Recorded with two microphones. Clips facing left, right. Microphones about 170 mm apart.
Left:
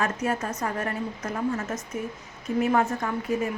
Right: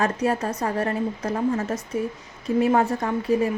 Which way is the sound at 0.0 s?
35° right (ahead or behind).